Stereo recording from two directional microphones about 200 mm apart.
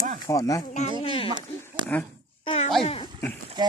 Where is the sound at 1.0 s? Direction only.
30° left (ahead or behind).